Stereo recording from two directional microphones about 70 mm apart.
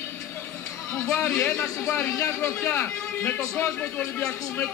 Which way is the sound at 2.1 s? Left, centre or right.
Left.